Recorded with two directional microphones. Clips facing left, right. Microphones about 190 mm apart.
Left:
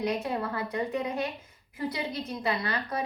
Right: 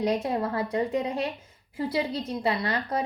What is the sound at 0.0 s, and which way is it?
A woman's voice, 30° right (ahead or behind).